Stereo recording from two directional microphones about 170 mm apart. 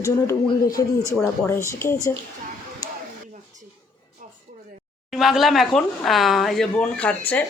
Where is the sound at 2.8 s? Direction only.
20° left (ahead or behind).